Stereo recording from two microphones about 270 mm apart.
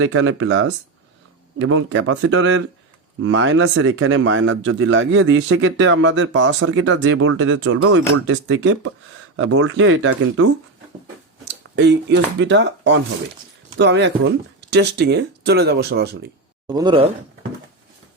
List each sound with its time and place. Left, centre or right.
0.0 s speech: right
11.4 s speech: right
16.6 s speech: centre